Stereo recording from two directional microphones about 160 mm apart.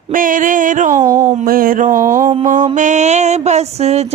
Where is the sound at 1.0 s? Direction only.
20° right (ahead or behind).